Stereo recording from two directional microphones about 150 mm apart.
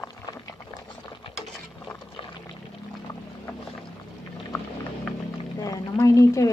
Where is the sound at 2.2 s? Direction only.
35° left (ahead or behind).